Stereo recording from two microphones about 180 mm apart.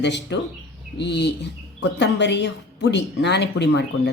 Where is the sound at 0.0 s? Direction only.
75° left (ahead or behind).